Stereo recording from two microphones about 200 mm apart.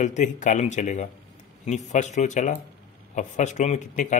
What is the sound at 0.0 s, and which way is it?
Speech, 40° left (ahead or behind).